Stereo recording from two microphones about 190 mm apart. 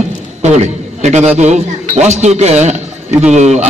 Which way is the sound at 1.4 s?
35° right (ahead or behind).